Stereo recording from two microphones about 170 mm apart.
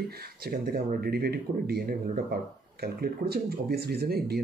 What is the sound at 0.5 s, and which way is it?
Speech, 65° right (ahead or behind).